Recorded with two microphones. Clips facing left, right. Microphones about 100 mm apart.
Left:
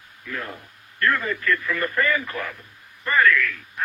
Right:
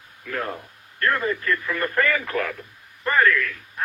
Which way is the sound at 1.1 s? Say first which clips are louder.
Right 2 dB; 30° right (ahead or behind).